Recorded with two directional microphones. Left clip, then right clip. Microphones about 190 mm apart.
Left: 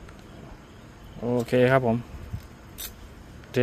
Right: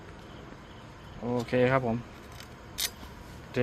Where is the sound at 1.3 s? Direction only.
40° left (ahead or behind).